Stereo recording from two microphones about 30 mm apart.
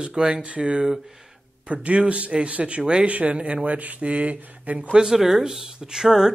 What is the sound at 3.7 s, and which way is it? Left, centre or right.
Speech, right.